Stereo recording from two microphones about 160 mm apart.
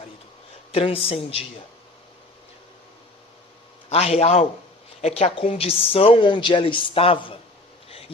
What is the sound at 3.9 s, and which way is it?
A woman's voice, 40° left (ahead or behind).